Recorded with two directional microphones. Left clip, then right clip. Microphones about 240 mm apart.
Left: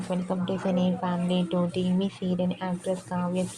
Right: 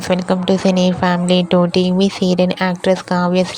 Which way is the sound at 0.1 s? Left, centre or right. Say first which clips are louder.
Right 14 dB; right.